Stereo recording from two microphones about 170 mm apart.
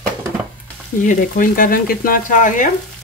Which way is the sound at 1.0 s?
50° left (ahead or behind).